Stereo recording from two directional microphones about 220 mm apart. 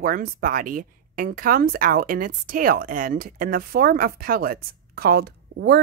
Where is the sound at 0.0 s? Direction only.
40° right (ahead or behind).